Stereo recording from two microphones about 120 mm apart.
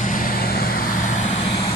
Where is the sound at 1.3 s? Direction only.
45° left (ahead or behind).